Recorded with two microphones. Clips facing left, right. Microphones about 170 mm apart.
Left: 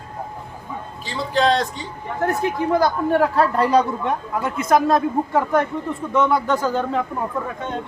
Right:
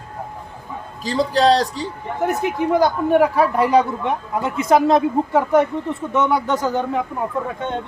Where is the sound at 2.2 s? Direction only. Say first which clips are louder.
Right 1 dB; 15° right (ahead or behind).